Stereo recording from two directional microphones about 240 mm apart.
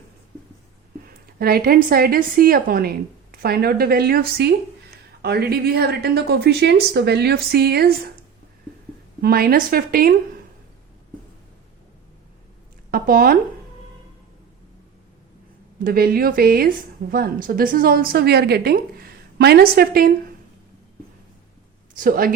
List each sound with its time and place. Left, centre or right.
1.4 s a woman's voice: right
9.2 s a woman's voice: right
12.9 s speech: right
15.8 s a woman's voice: right
21.9 s a woman's voice: right